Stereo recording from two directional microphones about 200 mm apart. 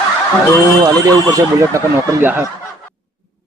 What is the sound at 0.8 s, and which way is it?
A man's voice, 15° right (ahead or behind).